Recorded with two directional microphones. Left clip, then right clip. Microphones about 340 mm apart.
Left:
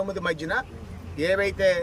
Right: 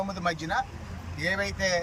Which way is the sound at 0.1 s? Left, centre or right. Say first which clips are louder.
Left 3 dB; centre.